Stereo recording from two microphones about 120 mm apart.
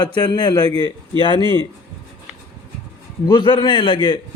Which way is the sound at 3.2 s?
40° left (ahead or behind).